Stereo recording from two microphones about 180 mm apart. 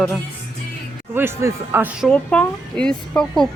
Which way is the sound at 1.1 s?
15° right (ahead or behind).